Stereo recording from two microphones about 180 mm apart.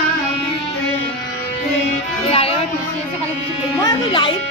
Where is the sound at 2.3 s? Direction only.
30° left (ahead or behind).